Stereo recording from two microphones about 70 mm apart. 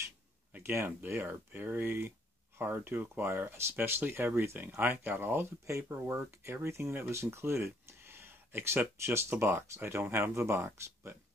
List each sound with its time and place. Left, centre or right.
0.5 s speech: right
5.7 s speech: right
8.9 s speech: right